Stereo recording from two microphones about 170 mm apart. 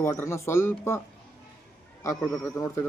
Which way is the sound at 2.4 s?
20° left (ahead or behind).